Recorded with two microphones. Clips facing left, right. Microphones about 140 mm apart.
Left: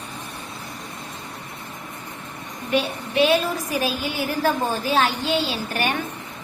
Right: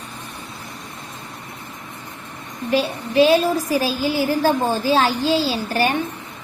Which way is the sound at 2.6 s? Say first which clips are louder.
Right 3 dB; 30° right (ahead or behind).